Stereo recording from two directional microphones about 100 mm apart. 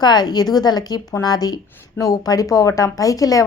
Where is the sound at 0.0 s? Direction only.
45° left (ahead or behind).